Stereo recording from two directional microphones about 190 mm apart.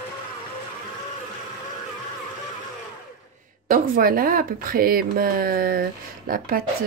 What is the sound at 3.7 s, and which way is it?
Speech, 50° right (ahead or behind).